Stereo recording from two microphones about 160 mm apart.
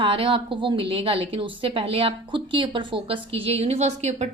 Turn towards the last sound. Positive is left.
turn(degrees=-45)  # may be behind; listen again after turning